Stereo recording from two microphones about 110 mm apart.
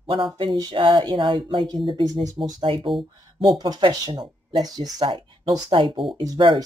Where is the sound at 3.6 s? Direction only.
45° right (ahead or behind).